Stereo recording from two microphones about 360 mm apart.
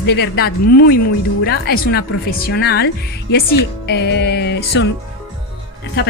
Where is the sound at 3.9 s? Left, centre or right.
Left.